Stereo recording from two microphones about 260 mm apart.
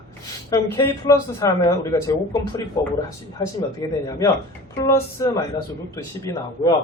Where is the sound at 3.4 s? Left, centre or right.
Centre.